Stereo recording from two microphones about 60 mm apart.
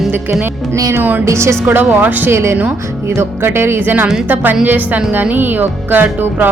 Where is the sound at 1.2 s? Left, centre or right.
Right.